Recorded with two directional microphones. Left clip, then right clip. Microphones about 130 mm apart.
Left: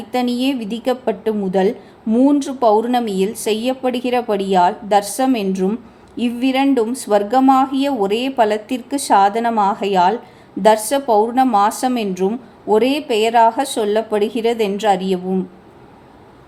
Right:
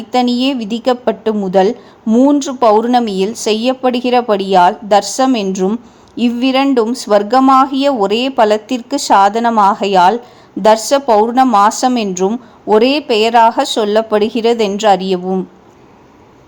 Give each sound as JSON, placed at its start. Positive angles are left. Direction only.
{"t": 0.1, "sound": "a woman's voice", "side_deg": -35}